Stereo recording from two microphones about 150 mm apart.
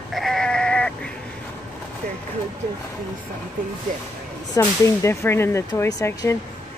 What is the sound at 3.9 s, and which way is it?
Speech, 60° right (ahead or behind).